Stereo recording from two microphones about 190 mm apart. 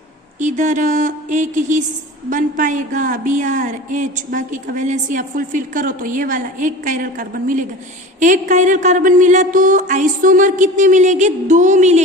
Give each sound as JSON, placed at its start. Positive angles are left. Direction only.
{"t": 0.3, "sound": "speech", "side_deg": -40}